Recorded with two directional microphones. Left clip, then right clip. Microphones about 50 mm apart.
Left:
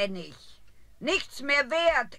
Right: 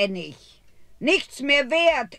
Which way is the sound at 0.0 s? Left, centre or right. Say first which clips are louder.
Right 6 dB; right.